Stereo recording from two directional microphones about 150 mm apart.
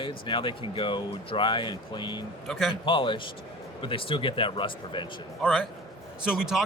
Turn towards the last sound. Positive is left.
turn(degrees=-5)  # may be behind; listen again after turning